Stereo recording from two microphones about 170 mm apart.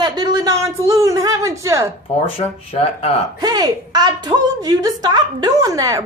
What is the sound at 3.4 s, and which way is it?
A man's voice, 25° right (ahead or behind).